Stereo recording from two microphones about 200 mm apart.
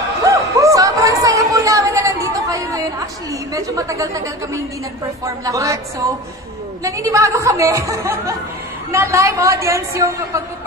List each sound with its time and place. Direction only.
0.2 s a sound: 15° right (ahead or behind)
3.5 s a woman's voice: 15° right (ahead or behind)
5.2 s a woman's voice: 15° right (ahead or behind)